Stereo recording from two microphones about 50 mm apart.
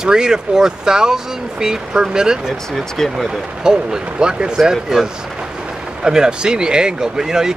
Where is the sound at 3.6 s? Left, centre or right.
Centre.